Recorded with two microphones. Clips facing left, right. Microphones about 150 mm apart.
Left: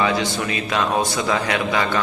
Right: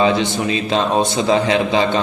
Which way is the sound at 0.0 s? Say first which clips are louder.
Right 5 dB; 25° right (ahead or behind).